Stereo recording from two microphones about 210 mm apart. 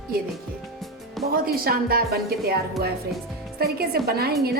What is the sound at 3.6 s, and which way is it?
Speech, 50° right (ahead or behind).